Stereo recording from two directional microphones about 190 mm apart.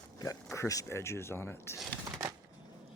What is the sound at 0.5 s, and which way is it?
Speech, 15° left (ahead or behind).